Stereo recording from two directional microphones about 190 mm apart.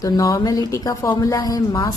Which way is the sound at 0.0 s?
20° left (ahead or behind).